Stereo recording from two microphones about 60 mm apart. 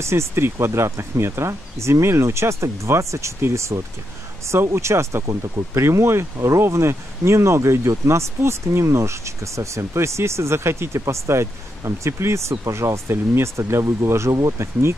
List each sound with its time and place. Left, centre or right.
0.0 s speech: right
5.2 s speech: right
5.8 s speech: right
6.3 s speech: right
6.7 s speech: right
14.6 s speech: right